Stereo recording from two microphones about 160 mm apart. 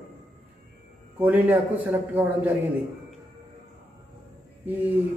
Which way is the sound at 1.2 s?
10° right (ahead or behind).